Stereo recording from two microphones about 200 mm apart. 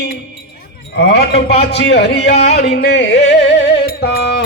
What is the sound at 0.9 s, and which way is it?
Speech, 60° left (ahead or behind).